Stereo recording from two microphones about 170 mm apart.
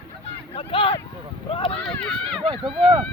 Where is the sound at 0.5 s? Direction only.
30° left (ahead or behind).